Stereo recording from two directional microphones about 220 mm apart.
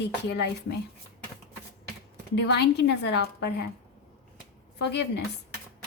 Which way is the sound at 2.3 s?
50° left (ahead or behind).